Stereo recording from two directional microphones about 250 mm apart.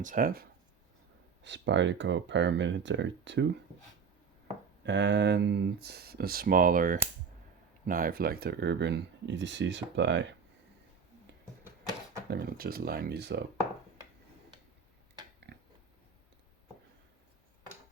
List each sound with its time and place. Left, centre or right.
0.0 s speech: right
1.5 s speech: right
4.8 s speech: right
12.3 s speech: right
15.5 s pig: right